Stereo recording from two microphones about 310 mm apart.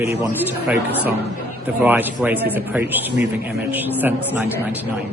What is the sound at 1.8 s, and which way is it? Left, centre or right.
Speech, centre.